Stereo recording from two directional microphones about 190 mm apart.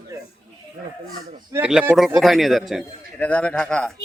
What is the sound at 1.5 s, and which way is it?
A man's voice, 5° right (ahead or behind).